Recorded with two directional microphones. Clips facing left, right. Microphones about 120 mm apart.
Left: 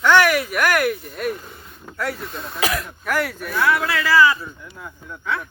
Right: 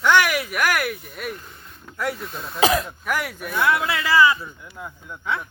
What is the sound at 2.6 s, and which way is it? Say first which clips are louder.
Speech: right 5 dB; 20° right (ahead or behind).